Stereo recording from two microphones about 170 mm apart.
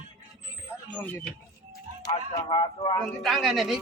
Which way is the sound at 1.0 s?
10° left (ahead or behind).